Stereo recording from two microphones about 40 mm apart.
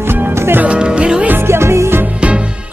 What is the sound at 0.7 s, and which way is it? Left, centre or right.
Music, right.